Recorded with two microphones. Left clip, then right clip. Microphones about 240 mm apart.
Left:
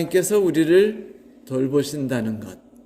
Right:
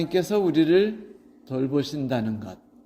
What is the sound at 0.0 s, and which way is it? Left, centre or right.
A man's voice, right.